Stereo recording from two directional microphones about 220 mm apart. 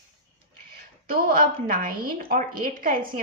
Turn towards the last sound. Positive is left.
turn(degrees=-40)  # may be behind; listen again after turning